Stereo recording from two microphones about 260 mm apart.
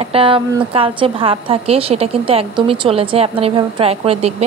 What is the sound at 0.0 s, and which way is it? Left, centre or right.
A woman's voice, right.